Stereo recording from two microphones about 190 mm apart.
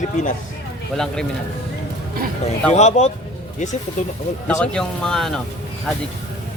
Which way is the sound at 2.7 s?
35° left (ahead or behind).